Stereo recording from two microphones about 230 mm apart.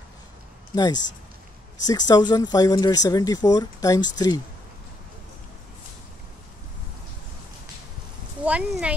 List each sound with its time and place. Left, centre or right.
0.7 s speech: centre
8.5 s speech: centre